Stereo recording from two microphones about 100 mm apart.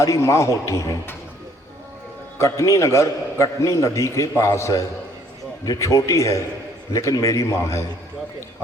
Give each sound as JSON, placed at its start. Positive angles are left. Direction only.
{"t": 0.0, "sound": "a man's voice", "side_deg": 30}
{"t": 2.4, "sound": "a man's voice", "side_deg": 30}